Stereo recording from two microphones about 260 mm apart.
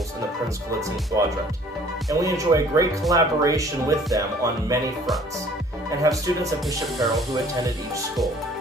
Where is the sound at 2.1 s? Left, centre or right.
Centre.